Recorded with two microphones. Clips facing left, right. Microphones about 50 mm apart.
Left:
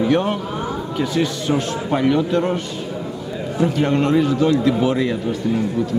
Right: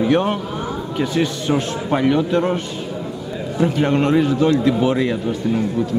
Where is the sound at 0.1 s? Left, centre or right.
Right.